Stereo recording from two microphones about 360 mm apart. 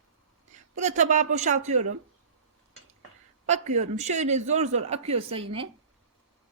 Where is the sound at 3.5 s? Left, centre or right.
Centre.